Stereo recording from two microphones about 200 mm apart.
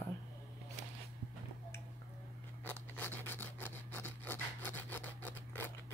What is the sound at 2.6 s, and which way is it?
Rub, 10° left (ahead or behind).